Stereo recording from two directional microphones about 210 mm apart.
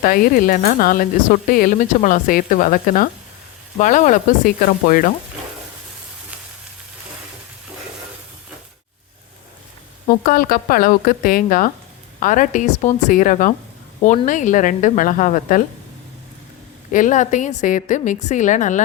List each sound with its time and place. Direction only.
0.0 s speech: 40° left (ahead or behind)
10.2 s speech: 45° left (ahead or behind)
16.9 s speech: 35° left (ahead or behind)